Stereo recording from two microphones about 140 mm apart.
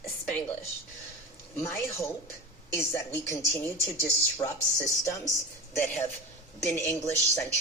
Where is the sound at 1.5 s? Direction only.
20° left (ahead or behind).